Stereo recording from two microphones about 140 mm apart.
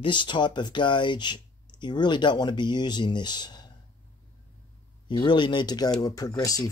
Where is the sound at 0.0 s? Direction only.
35° left (ahead or behind).